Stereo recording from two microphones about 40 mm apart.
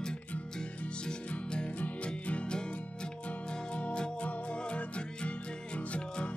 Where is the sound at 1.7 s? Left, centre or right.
Left.